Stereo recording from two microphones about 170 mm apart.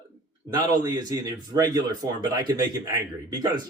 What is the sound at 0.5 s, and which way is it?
Speech, 20° right (ahead or behind).